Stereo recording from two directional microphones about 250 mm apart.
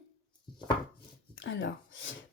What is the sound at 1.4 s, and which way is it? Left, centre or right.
Speech, left.